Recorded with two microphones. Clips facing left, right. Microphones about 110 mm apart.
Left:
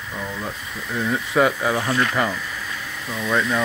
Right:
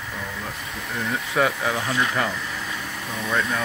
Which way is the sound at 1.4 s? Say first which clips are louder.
Left 3 dB; 5° left (ahead or behind).